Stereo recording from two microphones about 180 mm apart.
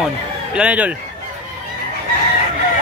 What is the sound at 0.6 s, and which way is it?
Speech, 5° right (ahead or behind).